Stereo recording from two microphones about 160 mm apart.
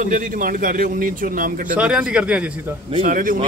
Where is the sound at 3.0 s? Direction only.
55° right (ahead or behind).